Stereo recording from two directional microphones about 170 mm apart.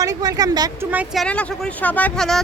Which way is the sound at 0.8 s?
10° right (ahead or behind).